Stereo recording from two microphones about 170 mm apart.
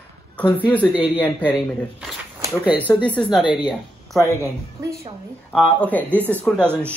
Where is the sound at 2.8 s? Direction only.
10° left (ahead or behind).